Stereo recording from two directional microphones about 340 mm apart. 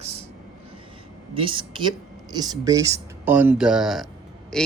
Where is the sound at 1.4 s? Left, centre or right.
Centre.